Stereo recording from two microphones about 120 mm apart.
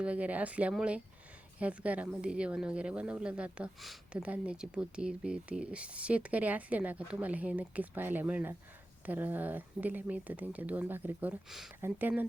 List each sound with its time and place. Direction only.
0.0 s speech: 10° right (ahead or behind)